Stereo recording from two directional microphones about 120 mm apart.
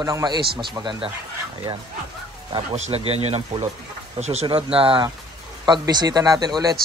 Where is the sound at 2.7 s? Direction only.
70° right (ahead or behind).